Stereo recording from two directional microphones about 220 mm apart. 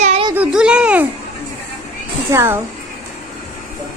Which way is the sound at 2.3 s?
10° right (ahead or behind).